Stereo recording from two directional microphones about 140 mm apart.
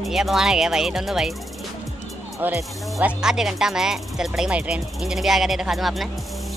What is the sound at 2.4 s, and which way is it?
Speech, 15° right (ahead or behind).